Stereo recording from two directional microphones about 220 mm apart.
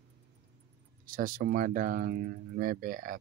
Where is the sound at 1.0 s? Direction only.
40° right (ahead or behind).